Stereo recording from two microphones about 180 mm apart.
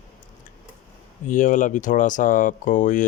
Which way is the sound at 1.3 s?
45° left (ahead or behind).